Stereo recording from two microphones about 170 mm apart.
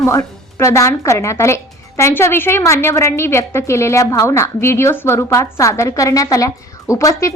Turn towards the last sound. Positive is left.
turn(degrees=15)  # may be behind; listen again after turning